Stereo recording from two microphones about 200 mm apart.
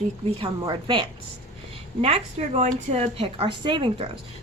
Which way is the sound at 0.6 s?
20° right (ahead or behind).